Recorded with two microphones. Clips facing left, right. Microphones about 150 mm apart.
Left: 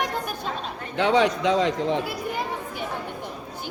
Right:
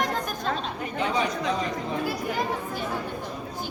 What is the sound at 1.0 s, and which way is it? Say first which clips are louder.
A man's voice: left 7 dB; 90° left.